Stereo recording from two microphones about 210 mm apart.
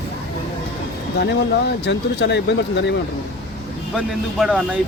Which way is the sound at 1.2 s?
55° left (ahead or behind).